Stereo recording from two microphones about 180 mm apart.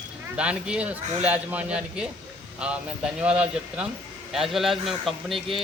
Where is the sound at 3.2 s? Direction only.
5° right (ahead or behind).